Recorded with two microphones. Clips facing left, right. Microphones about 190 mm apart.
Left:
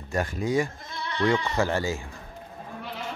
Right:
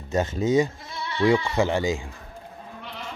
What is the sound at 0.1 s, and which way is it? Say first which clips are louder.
Speech: right 4 dB; 25° right (ahead or behind).